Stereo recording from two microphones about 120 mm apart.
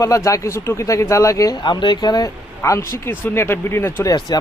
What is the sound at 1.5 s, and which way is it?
Speech, 40° left (ahead or behind).